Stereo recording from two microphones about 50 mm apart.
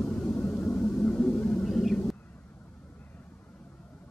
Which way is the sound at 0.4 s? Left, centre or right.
Left.